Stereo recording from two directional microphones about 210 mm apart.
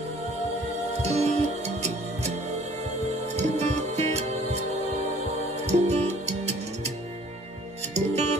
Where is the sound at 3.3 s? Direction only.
30° right (ahead or behind).